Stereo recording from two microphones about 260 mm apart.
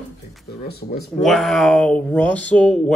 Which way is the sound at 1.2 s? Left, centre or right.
Centre.